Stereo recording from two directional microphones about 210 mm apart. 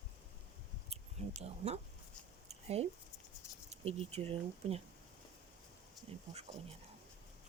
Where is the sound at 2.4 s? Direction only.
30° right (ahead or behind).